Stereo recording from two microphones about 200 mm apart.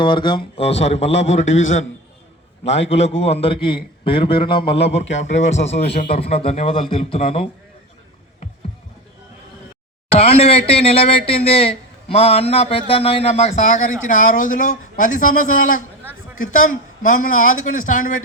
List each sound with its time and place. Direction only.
0.0 s speech: 25° left (ahead or behind)
2.9 s speech: 30° left (ahead or behind)
10.1 s speech: 30° left (ahead or behind)